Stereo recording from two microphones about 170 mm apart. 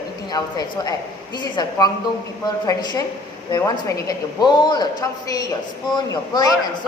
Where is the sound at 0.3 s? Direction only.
25° left (ahead or behind).